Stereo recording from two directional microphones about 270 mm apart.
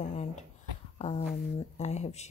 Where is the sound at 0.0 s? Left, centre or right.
Left.